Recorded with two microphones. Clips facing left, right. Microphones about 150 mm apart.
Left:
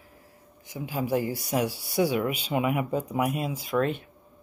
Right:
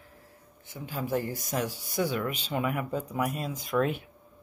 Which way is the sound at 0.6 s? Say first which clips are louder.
Left 4 dB; 10° left (ahead or behind).